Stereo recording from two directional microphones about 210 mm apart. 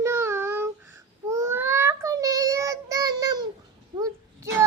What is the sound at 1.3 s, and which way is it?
Child singing, 15° right (ahead or behind).